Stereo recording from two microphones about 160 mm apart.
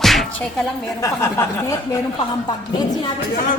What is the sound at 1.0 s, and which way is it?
Speech, 20° left (ahead or behind).